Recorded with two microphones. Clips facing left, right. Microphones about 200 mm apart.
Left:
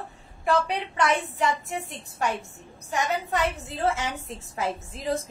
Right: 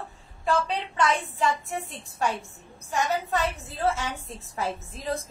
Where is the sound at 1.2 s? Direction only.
20° left (ahead or behind).